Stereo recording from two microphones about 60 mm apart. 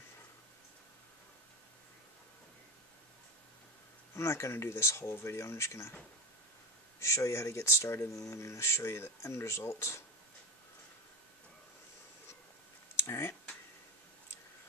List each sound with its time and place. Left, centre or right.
4.1 s speech: left
7.0 s speech: left